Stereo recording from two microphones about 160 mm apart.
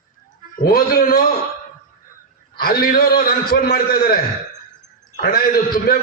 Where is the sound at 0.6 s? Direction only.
65° left (ahead or behind).